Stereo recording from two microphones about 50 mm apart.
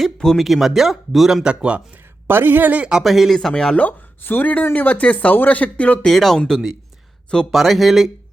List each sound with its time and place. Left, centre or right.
0.2 s speech: centre
0.4 s speech: centre
1.5 s speech: right
2.2 s speech: right
3.0 s speech: centre
3.3 s speech: centre
4.2 s speech: left
6.1 s speech: centre
7.5 s speech: centre